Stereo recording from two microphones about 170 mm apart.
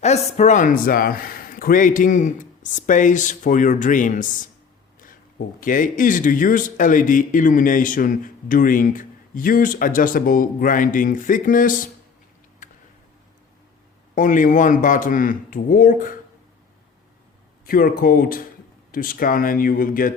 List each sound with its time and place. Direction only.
0.0 s speech: 40° left (ahead or behind)
5.5 s speech: 50° left (ahead or behind)
12.6 s a sound: 50° left (ahead or behind)
14.2 s speech: 50° left (ahead or behind)
17.7 s speech: 55° left (ahead or behind)